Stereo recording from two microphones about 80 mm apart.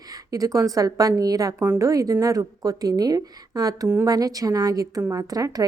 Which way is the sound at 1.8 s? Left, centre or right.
Right.